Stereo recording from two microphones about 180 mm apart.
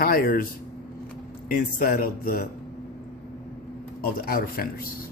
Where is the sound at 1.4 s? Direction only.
55° left (ahead or behind).